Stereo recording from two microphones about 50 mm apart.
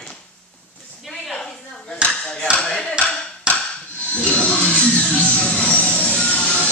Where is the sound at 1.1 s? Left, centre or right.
Centre.